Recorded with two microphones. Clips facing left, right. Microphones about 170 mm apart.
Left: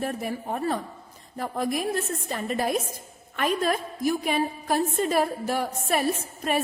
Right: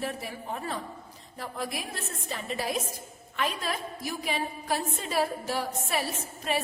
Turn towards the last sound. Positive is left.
turn(degrees=50)  # may be behind; listen again after turning